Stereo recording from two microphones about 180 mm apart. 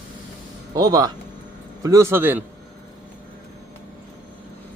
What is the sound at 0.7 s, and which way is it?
Speech, 20° right (ahead or behind).